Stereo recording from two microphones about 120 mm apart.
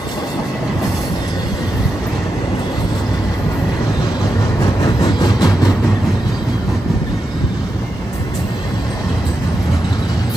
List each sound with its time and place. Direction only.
4.8 s vehicle: 35° left (ahead or behind)